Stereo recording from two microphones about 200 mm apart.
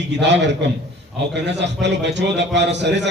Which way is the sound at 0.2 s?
60° right (ahead or behind).